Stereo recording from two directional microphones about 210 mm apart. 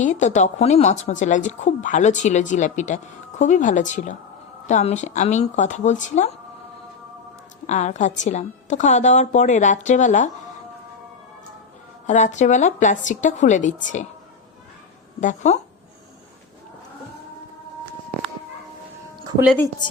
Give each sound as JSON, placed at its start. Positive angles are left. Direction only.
{"t": 0.0, "sound": "a woman's voice", "side_deg": 35}
{"t": 7.7, "sound": "a woman's voice", "side_deg": 35}
{"t": 12.0, "sound": "a woman's voice", "side_deg": 35}
{"t": 15.2, "sound": "a woman's voice", "side_deg": 35}
{"t": 19.8, "sound": "a woman's voice", "side_deg": 20}